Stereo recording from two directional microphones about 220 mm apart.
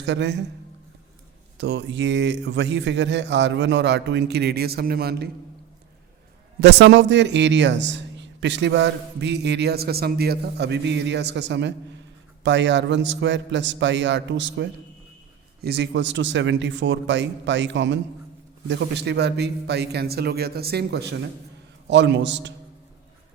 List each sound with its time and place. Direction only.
0.0 s a man's voice: 55° right (ahead or behind)
1.5 s a man's voice: 50° right (ahead or behind)
6.6 s a man's voice: 50° right (ahead or behind)